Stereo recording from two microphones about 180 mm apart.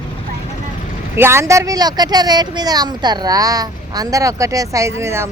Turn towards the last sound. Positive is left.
turn(degrees=-15)  # may be behind; listen again after turning